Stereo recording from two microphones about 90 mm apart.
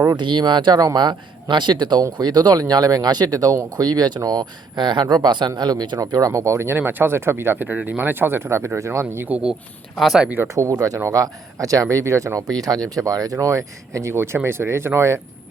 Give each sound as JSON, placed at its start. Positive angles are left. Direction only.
{"t": 0.2, "sound": "speech", "side_deg": -60}
{"t": 6.0, "sound": "speech", "side_deg": -45}
{"t": 9.3, "sound": "speech", "side_deg": -10}
{"t": 10.5, "sound": "speech", "side_deg": -35}